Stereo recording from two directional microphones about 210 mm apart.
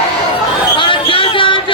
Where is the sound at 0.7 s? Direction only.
25° left (ahead or behind).